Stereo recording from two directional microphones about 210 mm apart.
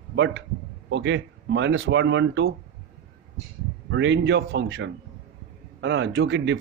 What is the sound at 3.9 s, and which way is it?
Speech, 60° right (ahead or behind).